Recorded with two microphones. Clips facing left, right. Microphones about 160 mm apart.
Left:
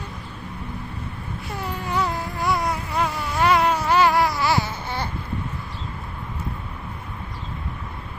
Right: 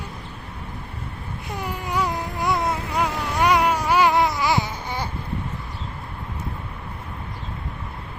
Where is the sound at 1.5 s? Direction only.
15° right (ahead or behind).